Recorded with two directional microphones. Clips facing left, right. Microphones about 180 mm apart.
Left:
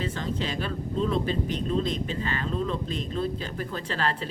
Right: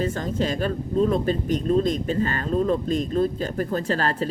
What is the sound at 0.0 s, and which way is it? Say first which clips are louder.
Speech: right 6 dB; 45° right (ahead or behind).